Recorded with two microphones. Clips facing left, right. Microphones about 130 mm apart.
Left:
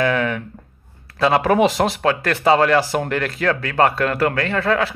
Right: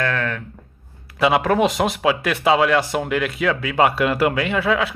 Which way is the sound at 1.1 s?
Centre (ahead or behind).